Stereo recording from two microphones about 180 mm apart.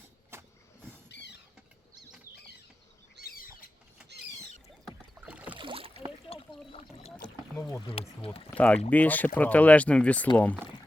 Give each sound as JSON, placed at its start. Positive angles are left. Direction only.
{"t": 0.3, "sound": "vehicle", "side_deg": -15}
{"t": 1.0, "sound": "rodents", "side_deg": 70}
{"t": 3.2, "sound": "rodents", "side_deg": 55}
{"t": 5.1, "sound": "rowboat", "side_deg": -10}
{"t": 5.5, "sound": "rowboat", "side_deg": -30}
{"t": 6.2, "sound": "a sound", "side_deg": 30}
{"t": 6.7, "sound": "boat", "side_deg": 35}
{"t": 7.5, "sound": "speech", "side_deg": 15}
{"t": 7.9, "sound": "speech", "side_deg": 30}
{"t": 8.4, "sound": "speech", "side_deg": 5}